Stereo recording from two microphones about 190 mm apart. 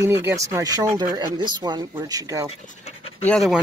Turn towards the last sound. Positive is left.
turn(degrees=0)  # may be behind; listen again after turning